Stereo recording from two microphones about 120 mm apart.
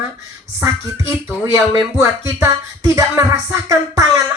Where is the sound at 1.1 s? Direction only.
30° right (ahead or behind).